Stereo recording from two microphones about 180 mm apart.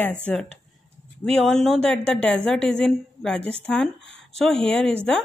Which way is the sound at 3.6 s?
5° left (ahead or behind).